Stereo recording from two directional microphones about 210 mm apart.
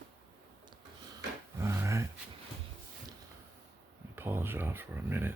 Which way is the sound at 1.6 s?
10° right (ahead or behind).